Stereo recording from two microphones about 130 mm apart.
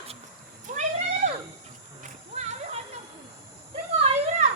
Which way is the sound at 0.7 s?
80° right.